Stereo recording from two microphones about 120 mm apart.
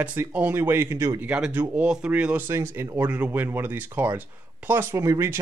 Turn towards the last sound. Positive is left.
turn(degrees=-25)  # may be behind; listen again after turning